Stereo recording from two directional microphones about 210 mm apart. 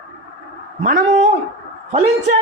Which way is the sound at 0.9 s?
35° right (ahead or behind).